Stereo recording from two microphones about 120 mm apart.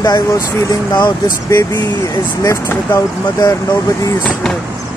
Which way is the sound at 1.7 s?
25° left (ahead or behind).